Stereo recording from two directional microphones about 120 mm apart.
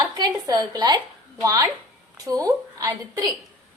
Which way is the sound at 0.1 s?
35° right (ahead or behind).